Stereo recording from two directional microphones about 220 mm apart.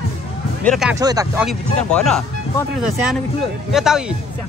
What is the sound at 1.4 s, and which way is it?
Speech, centre (ahead or behind).